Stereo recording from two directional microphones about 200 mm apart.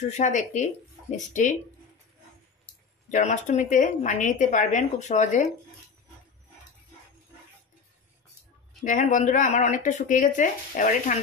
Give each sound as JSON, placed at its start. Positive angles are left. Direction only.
{"t": 0.0, "sound": "speech", "side_deg": 35}
{"t": 3.1, "sound": "speech", "side_deg": 40}
{"t": 8.8, "sound": "speech", "side_deg": 40}